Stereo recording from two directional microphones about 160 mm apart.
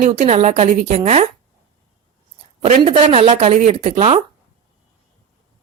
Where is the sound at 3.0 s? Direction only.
40° right (ahead or behind).